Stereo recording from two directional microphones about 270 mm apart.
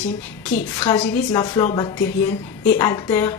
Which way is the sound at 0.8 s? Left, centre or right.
Centre.